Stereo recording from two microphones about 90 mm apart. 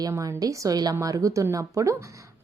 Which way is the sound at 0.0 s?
40° right (ahead or behind).